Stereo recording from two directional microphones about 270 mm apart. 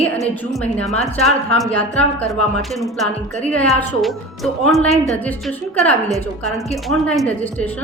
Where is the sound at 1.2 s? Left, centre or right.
Centre.